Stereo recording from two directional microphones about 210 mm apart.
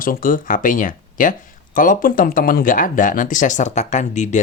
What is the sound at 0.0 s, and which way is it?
Speech, 40° left (ahead or behind).